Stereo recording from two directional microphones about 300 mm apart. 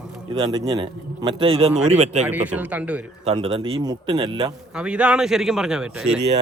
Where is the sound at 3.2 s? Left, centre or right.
Centre.